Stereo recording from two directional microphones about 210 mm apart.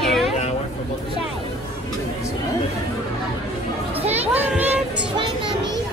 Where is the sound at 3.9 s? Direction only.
30° right (ahead or behind).